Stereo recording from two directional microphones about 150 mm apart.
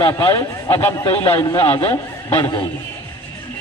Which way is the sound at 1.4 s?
25° left (ahead or behind).